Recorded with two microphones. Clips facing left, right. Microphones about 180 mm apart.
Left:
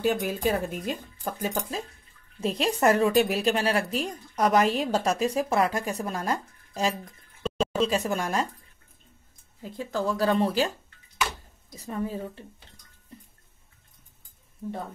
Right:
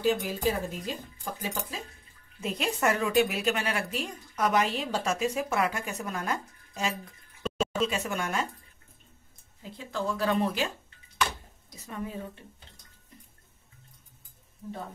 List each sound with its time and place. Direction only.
0.0 s speech: 55° left (ahead or behind)
1.4 s a woman's voice: 40° left (ahead or behind)
9.6 s a woman's voice: 40° left (ahead or behind)
11.8 s a woman's voice: 35° left (ahead or behind)